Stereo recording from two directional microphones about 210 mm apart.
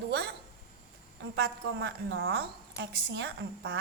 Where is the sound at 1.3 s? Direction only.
60° right (ahead or behind).